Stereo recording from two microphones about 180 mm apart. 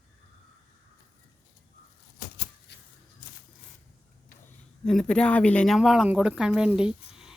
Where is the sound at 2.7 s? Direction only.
70° left (ahead or behind).